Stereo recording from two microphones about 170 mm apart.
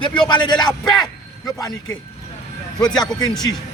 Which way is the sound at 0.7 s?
Centre (ahead or behind).